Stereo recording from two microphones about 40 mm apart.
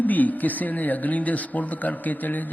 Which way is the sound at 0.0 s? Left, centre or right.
Left.